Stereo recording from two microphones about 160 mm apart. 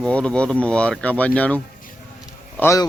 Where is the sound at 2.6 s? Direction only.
20° left (ahead or behind).